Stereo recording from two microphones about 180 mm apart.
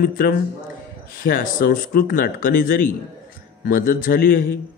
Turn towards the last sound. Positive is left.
turn(degrees=55)  # may be behind; listen again after turning